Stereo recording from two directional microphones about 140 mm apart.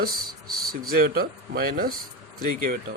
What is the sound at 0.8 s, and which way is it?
Speech, 90° right.